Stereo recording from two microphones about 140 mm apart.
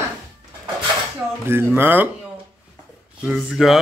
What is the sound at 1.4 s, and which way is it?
Speech, 15° right (ahead or behind).